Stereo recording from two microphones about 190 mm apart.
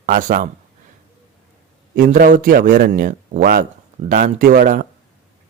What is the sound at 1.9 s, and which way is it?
A man's voice, 45° right (ahead or behind).